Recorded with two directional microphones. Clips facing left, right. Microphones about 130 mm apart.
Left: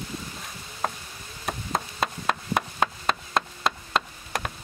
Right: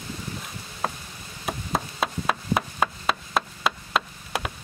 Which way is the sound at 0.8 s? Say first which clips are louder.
Even; centre (ahead or behind).